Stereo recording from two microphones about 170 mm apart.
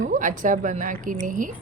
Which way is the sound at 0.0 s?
50° right (ahead or behind).